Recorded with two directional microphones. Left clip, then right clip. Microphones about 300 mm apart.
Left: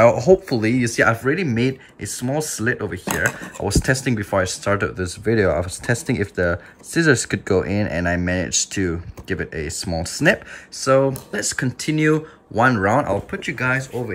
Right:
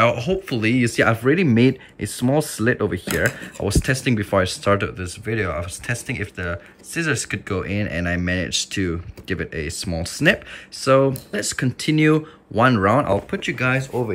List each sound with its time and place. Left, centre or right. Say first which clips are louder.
0.0 s speech: left 5 dB; centre